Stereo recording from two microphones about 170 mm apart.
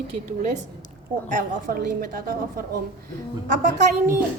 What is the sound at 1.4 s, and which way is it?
A woman's voice, 60° right (ahead or behind).